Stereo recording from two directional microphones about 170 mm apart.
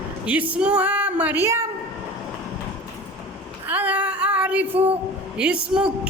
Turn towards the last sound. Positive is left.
turn(degrees=-5)  # may be behind; listen again after turning